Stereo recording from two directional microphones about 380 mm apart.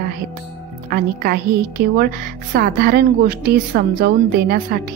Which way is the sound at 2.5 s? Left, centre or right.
Right.